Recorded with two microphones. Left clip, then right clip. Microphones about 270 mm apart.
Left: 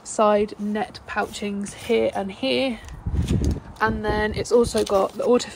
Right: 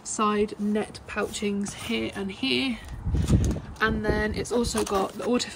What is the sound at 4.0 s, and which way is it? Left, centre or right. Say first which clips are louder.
Speech: left 3 dB; centre.